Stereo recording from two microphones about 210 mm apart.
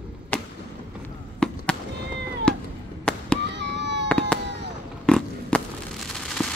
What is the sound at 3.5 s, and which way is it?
Fireworks, 55° right (ahead or behind).